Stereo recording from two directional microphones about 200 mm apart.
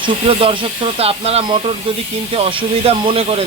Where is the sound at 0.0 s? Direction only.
25° right (ahead or behind).